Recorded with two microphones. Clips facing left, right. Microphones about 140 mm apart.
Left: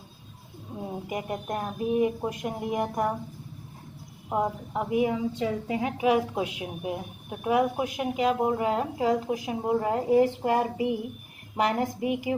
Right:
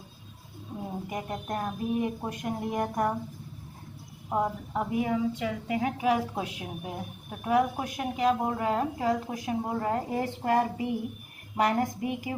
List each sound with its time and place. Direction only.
1.1 s speech: 10° left (ahead or behind)
4.3 s a woman's voice: 5° left (ahead or behind)
5.4 s a woman's voice: 30° left (ahead or behind)
6.0 s speech: 15° left (ahead or behind)